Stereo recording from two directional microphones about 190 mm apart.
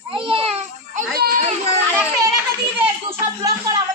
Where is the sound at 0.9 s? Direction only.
55° right (ahead or behind).